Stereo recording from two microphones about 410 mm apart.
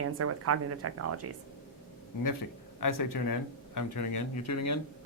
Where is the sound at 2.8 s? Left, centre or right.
Left.